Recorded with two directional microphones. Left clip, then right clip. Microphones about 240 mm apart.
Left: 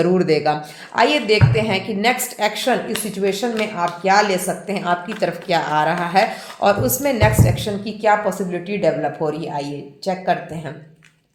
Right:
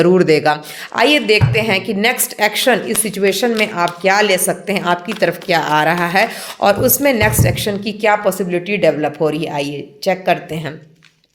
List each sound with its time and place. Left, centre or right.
0.0 s a woman's voice: right